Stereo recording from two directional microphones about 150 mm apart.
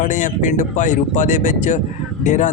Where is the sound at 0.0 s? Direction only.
60° left (ahead or behind).